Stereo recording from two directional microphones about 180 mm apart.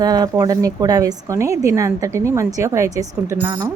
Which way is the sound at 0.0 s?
20° right (ahead or behind).